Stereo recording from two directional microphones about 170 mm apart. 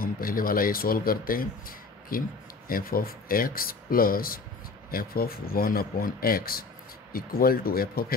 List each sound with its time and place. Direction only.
0.0 s speech: 55° left (ahead or behind)